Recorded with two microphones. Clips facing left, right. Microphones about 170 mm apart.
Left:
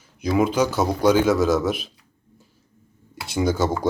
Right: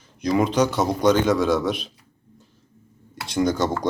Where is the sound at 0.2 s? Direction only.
5° left (ahead or behind).